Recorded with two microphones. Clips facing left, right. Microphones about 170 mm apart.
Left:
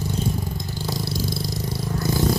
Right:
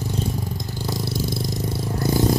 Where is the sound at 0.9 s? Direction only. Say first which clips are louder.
Right 1 dB; 20° right (ahead or behind).